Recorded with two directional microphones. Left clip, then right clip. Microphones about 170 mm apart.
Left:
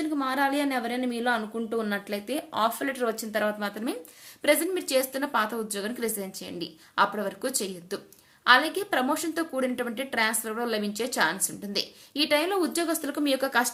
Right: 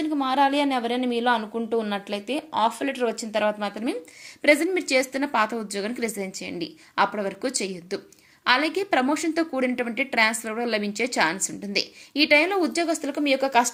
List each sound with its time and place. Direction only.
0.0 s a woman's voice: 10° right (ahead or behind)